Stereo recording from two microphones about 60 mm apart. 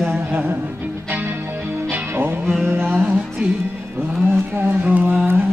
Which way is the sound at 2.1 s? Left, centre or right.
Right.